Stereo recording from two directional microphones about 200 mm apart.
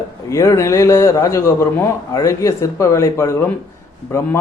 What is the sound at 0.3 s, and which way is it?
Speech, 15° left (ahead or behind).